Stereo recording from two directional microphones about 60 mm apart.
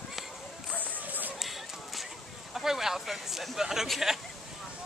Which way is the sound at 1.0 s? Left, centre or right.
Right.